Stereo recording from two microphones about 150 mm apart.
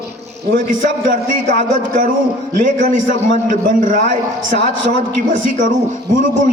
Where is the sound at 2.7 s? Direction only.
60° right (ahead or behind).